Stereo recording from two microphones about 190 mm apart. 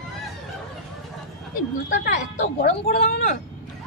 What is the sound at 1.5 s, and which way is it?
Speech, 45° left (ahead or behind).